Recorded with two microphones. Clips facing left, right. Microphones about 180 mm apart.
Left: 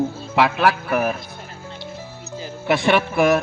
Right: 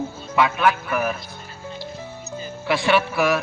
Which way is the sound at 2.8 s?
50° left (ahead or behind).